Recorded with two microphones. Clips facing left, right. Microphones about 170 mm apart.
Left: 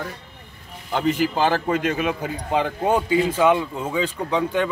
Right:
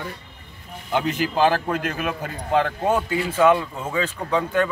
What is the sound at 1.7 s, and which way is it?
A man's voice, centre (ahead or behind).